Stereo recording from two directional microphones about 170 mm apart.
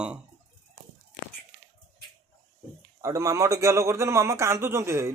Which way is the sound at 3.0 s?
20° right (ahead or behind).